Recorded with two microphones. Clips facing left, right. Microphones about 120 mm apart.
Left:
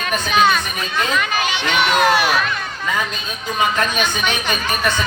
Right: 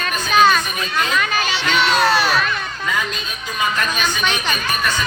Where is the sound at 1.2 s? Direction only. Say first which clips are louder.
Even; 15° left (ahead or behind).